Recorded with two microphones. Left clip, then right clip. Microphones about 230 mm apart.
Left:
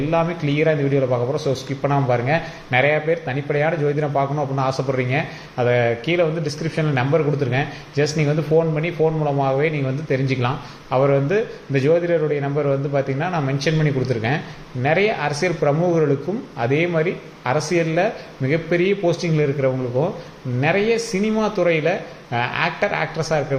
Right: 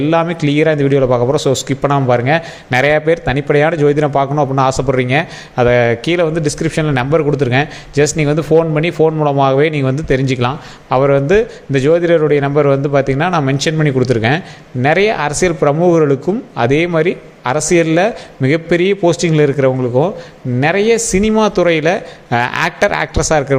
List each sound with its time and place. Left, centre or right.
0.1 s a man's voice: right